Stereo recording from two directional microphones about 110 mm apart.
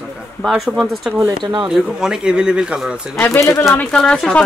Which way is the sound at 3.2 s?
25° left (ahead or behind).